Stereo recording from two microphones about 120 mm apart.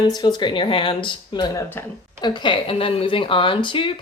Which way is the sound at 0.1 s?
35° left (ahead or behind).